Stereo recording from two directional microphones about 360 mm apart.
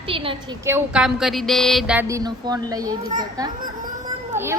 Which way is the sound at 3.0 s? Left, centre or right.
Right.